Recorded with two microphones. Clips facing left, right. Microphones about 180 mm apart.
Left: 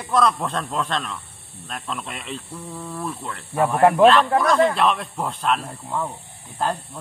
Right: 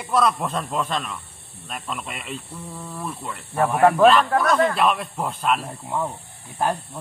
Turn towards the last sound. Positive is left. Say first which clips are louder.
# right 1 dB
turn(degrees=-10)  # may be behind; listen again after turning